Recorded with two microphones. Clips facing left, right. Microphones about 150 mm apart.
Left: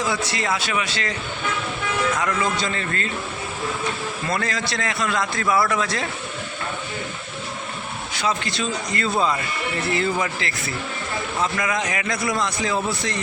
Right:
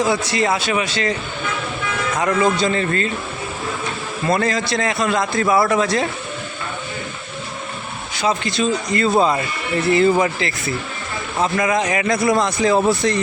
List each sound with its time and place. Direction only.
0.0 s a man's voice: 20° right (ahead or behind)
2.1 s a man's voice: 40° right (ahead or behind)
2.4 s a man's voice: 20° right (ahead or behind)
4.3 s a man's voice: 25° right (ahead or behind)
5.5 s a man's voice: 35° right (ahead or behind)
8.4 s speech: 15° right (ahead or behind)
9.1 s a man's voice: 35° right (ahead or behind)
9.9 s a man's voice: 25° right (ahead or behind)
12.4 s speech: 45° right (ahead or behind)